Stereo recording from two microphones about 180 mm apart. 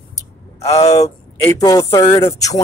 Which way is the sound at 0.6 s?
35° left (ahead or behind).